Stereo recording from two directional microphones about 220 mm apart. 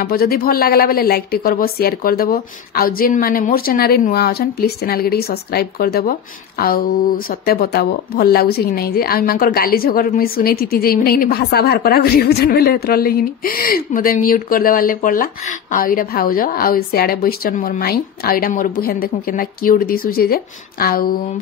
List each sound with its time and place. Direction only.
0.0 s speech: 45° left (ahead or behind)